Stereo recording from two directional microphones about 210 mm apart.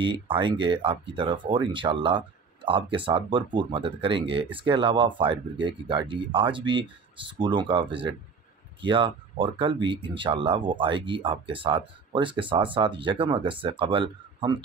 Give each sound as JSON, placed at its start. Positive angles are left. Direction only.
{"t": 0.0, "sound": "speech", "side_deg": -25}